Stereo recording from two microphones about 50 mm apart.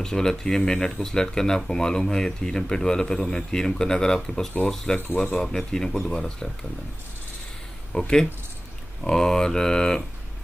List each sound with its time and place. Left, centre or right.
0.0 s speech: centre
7.9 s speech: centre